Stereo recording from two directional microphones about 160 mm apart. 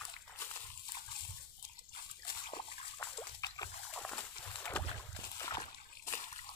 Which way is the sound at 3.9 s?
5° left (ahead or behind).